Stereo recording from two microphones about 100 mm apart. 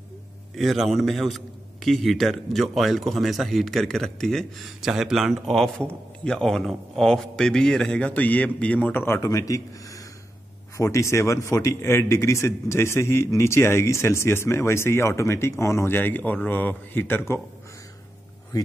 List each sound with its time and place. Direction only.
0.6 s a man's voice: centre (ahead or behind)
9.0 s a man's voice: 30° left (ahead or behind)